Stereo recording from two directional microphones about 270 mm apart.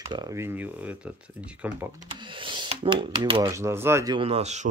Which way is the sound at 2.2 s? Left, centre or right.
Centre.